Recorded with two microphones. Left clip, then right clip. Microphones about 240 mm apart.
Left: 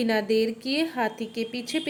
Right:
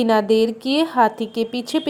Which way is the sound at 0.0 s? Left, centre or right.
Centre.